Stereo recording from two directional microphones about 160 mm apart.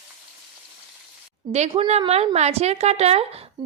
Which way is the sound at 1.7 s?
40° right (ahead or behind).